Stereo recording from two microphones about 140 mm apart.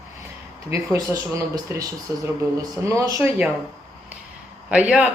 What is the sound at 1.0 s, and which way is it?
Speech, 20° right (ahead or behind).